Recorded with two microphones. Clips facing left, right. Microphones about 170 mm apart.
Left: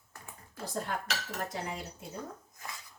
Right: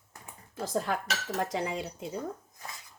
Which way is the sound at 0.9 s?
90° right.